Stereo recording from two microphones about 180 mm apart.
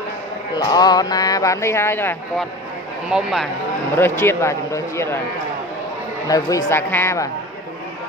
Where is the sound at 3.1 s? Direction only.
5° right (ahead or behind).